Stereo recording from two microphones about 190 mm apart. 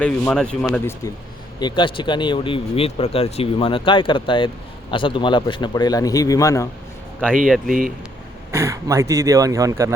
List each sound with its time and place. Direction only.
0.0 s speech: 5° left (ahead or behind)
1.5 s speech: 25° left (ahead or behind)
7.7 s speech: 45° right (ahead or behind)
8.5 s speech: 15° right (ahead or behind)